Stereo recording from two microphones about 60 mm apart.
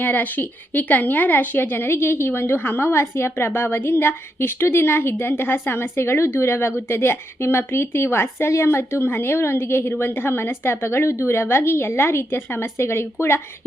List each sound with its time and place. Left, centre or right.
0.0 s a woman's voice: left